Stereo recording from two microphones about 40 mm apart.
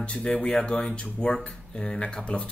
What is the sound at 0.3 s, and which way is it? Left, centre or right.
Speech, left.